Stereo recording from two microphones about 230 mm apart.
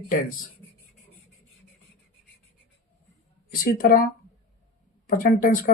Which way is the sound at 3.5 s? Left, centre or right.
Left.